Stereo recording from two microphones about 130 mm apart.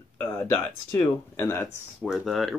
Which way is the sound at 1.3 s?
20° left (ahead or behind).